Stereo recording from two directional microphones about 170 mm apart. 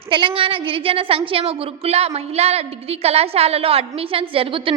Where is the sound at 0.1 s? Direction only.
30° right (ahead or behind).